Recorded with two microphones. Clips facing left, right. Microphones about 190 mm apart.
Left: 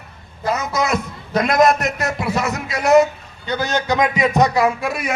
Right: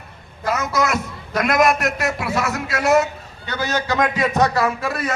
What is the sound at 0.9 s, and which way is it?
A man's voice, 20° left (ahead or behind).